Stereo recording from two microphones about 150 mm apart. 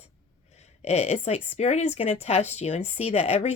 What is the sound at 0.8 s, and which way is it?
Speech, 45° left (ahead or behind).